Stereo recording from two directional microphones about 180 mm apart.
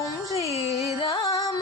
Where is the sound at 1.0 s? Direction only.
20° left (ahead or behind).